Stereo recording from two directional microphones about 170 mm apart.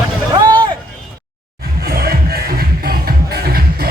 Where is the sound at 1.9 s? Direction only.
65° right (ahead or behind).